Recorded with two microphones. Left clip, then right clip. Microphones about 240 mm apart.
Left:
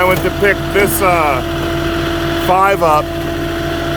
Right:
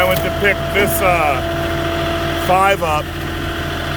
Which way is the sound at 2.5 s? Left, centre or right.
Centre.